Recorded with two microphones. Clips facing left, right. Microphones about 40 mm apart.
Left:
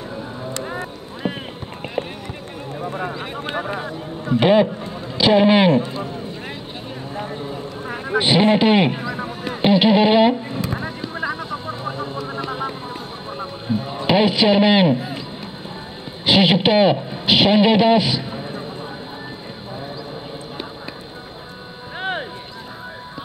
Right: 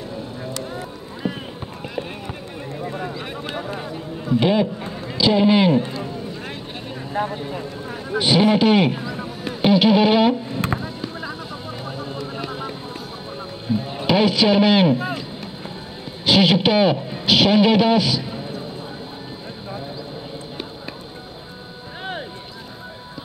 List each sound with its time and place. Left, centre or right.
0.5 s a sound: left
1.2 s run: left
3.0 s a man's voice: left
7.9 s speech: left
9.6 s a sound: centre
11.1 s vehicle: left
12.4 s run: left
13.7 s a sound: centre
14.0 s speech: centre
16.3 s a man's voice: centre